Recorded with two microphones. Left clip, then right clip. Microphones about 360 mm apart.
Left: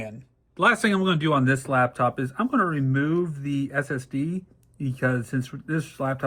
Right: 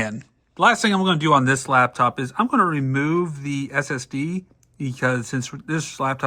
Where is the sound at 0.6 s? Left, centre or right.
Centre.